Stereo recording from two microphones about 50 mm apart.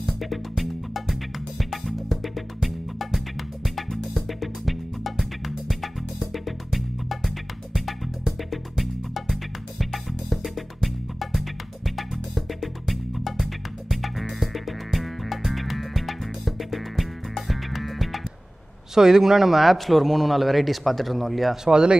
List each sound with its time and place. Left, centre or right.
0.0 s music: centre
18.9 s a man's voice: centre
21.6 s speech: centre